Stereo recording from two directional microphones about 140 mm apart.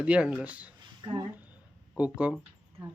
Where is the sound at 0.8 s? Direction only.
35° right (ahead or behind).